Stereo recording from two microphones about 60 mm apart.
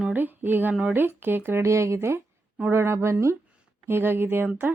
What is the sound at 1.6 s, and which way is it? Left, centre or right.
Speech, right.